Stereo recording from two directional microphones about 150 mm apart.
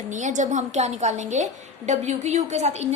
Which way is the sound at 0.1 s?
55° right (ahead or behind).